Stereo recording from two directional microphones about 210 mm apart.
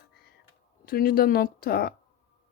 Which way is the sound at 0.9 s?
45° left (ahead or behind).